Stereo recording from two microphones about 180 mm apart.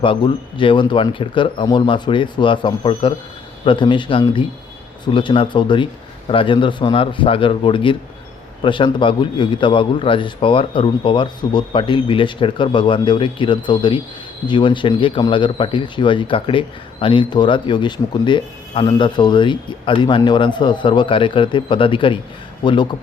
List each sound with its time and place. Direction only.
0.0 s speech: 25° left (ahead or behind)